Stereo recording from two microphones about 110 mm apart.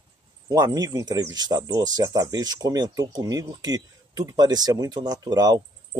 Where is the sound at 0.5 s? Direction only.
35° right (ahead or behind).